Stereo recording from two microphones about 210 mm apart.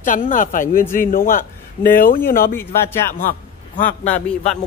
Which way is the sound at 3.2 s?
40° left (ahead or behind).